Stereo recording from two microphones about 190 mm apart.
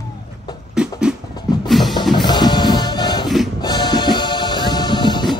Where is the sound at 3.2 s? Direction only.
Centre (ahead or behind).